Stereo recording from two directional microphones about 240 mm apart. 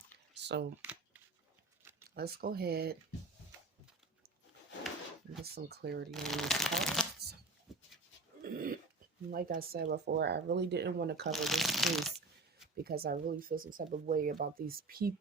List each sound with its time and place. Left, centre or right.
0.3 s a sound: right
0.8 s a sound: centre
2.1 s speech: right
5.4 s speech: right
6.1 s speech: centre
8.5 s speech: right
11.3 s speech: centre
12.7 s speech: right